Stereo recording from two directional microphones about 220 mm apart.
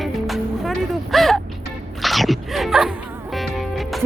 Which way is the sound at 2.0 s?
Centre (ahead or behind).